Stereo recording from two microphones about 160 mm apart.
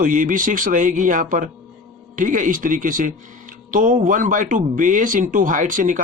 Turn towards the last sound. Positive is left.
turn(degrees=-55)  # may be behind; listen again after turning